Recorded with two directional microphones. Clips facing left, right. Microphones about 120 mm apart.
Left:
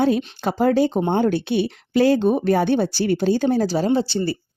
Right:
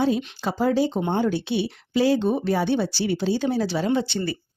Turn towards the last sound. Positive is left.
turn(degrees=30)  # may be behind; listen again after turning